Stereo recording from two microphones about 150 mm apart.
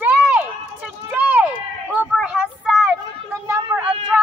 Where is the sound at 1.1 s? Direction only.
10° right (ahead or behind).